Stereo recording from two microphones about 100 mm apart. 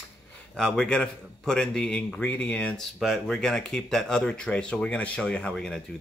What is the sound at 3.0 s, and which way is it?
Speech, centre (ahead or behind).